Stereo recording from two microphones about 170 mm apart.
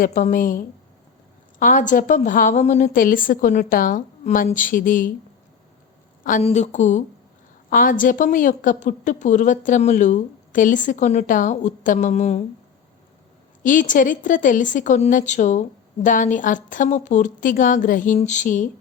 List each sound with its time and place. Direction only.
0.0 s a woman's voice: 50° left (ahead or behind)
6.4 s a woman's voice: 45° left (ahead or behind)
13.6 s a woman's voice: 50° left (ahead or behind)